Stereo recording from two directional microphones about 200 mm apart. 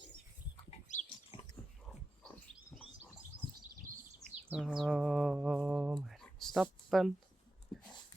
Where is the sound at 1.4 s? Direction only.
25° left (ahead or behind).